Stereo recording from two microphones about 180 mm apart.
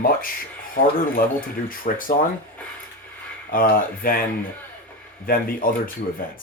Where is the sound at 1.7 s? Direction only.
50° left (ahead or behind).